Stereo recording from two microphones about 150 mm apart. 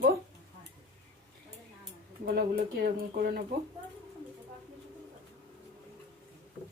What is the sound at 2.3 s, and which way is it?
Speech, 90° right.